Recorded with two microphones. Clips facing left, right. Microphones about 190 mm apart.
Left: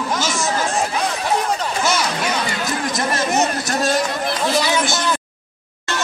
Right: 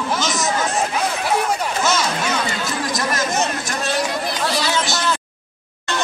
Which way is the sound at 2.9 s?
25° left (ahead or behind).